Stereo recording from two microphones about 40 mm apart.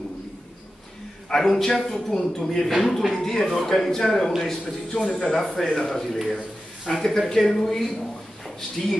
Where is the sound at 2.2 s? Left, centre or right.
Left.